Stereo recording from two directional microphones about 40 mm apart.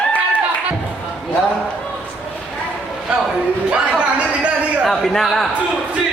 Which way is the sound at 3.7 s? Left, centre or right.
Right.